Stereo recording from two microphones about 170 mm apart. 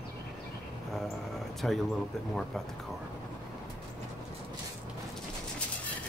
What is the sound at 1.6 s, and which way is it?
Speech, 5° left (ahead or behind).